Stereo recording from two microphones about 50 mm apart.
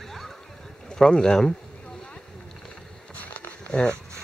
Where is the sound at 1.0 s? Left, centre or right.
Centre.